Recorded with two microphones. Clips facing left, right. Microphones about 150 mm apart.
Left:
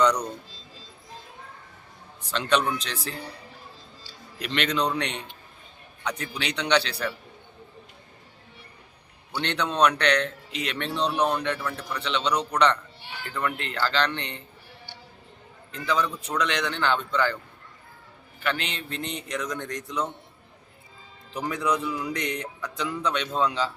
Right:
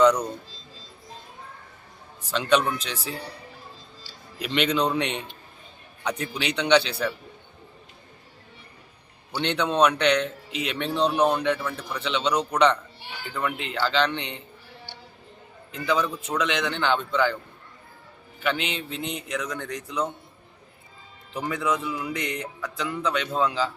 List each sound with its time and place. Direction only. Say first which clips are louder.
0.0 s speech: right 4 dB; 5° right (ahead or behind)
2.3 s a man's voice: right 2 dB; 5° right (ahead or behind)
4.4 s a man's voice: right 3 dB; 5° right (ahead or behind)
9.4 s a man's voice: right 2 dB; 5° right (ahead or behind)
15.7 s a man's voice: right 2 dB; 5° right (ahead or behind)
18.4 s a man's voice: right 2 dB; 5° right (ahead or behind)
21.3 s a man's voice: even; centre (ahead or behind)